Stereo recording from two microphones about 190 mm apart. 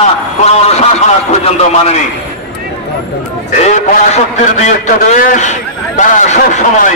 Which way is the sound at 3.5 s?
35° left (ahead or behind).